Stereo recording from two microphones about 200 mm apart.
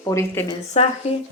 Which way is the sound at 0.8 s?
35° left (ahead or behind).